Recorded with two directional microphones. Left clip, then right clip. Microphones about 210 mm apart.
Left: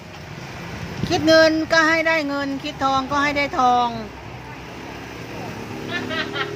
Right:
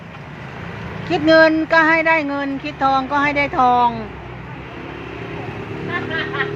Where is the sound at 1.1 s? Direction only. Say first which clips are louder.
Right 2 dB; 10° left (ahead or behind).